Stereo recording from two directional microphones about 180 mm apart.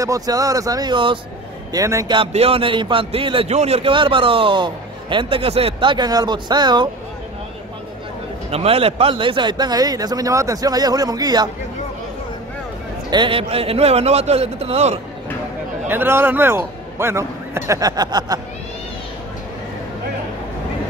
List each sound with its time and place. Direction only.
0.0 s a man's voice: 20° right (ahead or behind)
8.5 s a man's voice: 35° right (ahead or behind)
13.1 s a man's voice: 30° right (ahead or behind)
15.9 s a man's voice: 10° right (ahead or behind)